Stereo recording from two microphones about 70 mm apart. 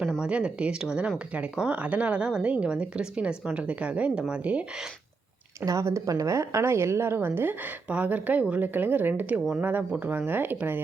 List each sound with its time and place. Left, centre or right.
0.2 s a woman's voice: centre
5.6 s a woman's voice: right